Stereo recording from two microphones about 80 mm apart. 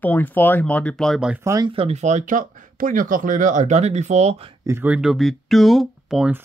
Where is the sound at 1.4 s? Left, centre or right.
Right.